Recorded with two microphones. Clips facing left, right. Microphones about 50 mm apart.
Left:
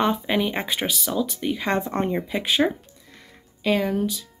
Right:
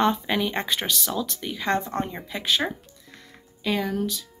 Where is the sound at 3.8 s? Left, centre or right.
Centre.